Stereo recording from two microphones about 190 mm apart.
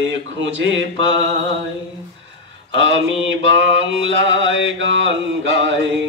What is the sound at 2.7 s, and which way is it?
Mantra, 80° right.